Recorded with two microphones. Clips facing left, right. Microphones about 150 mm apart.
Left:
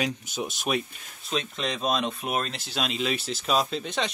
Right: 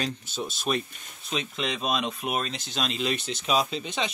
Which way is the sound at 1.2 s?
Centre (ahead or behind).